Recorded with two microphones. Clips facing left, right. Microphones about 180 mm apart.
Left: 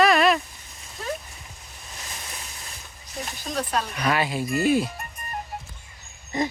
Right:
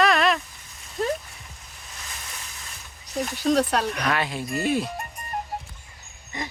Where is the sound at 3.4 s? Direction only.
70° right (ahead or behind).